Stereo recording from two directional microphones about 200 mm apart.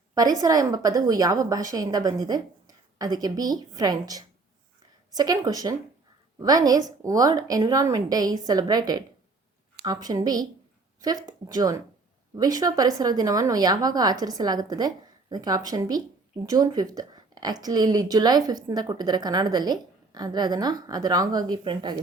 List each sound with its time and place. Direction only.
0.1 s a woman's voice: 20° right (ahead or behind)